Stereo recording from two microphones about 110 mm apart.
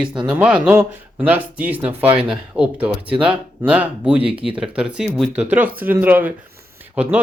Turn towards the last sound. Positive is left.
turn(degrees=-15)  # may be behind; listen again after turning